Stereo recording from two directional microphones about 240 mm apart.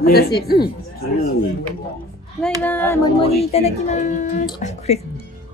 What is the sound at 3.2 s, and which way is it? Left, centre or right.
Speech, left.